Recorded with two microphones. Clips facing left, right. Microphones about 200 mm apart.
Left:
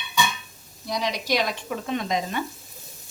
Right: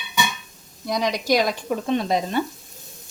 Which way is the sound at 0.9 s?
50° right (ahead or behind).